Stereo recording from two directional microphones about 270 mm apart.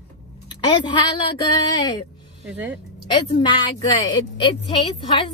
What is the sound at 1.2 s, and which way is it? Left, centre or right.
Speech, centre.